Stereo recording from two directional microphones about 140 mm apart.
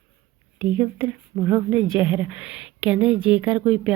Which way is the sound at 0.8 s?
15° right (ahead or behind).